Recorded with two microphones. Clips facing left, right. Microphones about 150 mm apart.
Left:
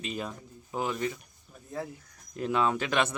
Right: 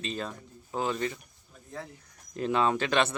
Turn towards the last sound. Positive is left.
turn(degrees=10)  # may be behind; listen again after turning